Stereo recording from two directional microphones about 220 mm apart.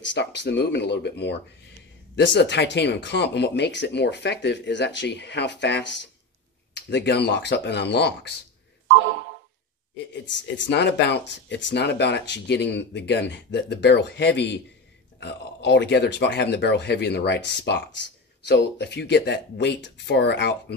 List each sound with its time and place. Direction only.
0.0 s speech: 55° left (ahead or behind)
6.9 s speech: 50° left (ahead or behind)
10.7 s speech: 50° left (ahead or behind)